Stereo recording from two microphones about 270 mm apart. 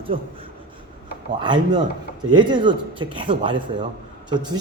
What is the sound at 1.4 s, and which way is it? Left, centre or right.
Speech, centre.